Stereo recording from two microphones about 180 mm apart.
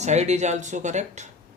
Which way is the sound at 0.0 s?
40° right (ahead or behind).